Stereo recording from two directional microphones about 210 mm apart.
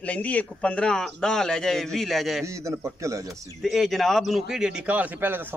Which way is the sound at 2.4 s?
15° right (ahead or behind).